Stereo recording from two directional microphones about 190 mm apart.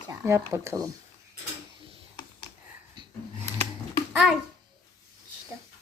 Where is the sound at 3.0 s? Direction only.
25° right (ahead or behind).